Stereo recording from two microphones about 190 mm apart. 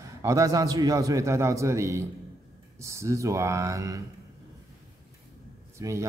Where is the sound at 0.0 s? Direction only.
15° right (ahead or behind).